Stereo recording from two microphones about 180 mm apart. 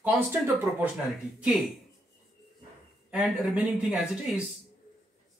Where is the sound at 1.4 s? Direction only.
5° right (ahead or behind).